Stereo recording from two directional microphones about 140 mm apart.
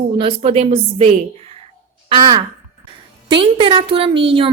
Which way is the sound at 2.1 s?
35° right (ahead or behind).